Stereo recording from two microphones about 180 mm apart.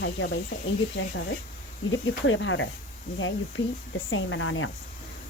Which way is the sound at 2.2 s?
90° left.